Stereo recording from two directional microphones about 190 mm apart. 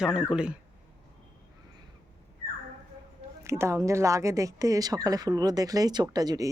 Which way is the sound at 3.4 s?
15° right (ahead or behind).